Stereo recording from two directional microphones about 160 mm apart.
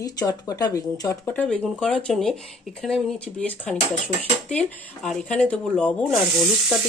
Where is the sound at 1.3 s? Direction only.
5° left (ahead or behind).